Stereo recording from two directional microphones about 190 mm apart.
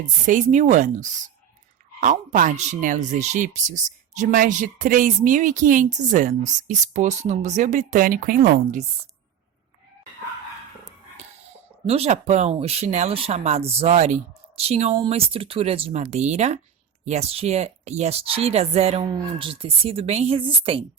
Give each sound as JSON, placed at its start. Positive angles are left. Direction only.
{"t": 0.3, "sound": "speech", "side_deg": -40}
{"t": 11.9, "sound": "speech", "side_deg": -35}